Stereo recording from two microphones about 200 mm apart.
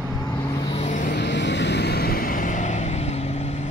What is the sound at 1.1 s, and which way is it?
Vehicle, 60° left (ahead or behind).